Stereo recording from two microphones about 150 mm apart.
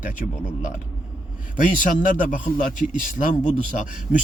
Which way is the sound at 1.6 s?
60° left (ahead or behind).